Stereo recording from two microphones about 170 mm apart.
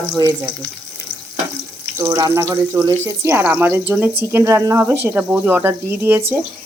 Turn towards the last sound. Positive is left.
turn(degrees=-10)  # may be behind; listen again after turning